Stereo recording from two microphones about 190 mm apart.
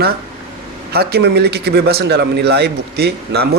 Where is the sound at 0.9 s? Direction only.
60° right (ahead or behind).